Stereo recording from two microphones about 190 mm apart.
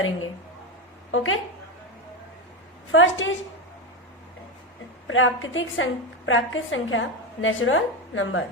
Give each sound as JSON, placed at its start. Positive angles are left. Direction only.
{"t": 1.1, "sound": "a woman's voice", "side_deg": 90}
{"t": 2.9, "sound": "a woman's voice", "side_deg": 85}
{"t": 5.0, "sound": "a woman's voice", "side_deg": 90}